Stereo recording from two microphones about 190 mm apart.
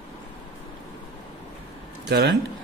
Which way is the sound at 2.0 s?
60° right (ahead or behind).